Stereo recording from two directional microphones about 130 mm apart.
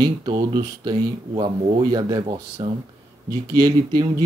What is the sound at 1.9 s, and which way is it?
Speech, 35° right (ahead or behind).